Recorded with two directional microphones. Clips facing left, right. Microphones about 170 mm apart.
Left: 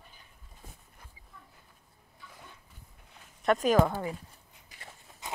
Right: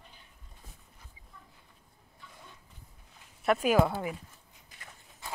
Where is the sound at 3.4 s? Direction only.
10° right (ahead or behind).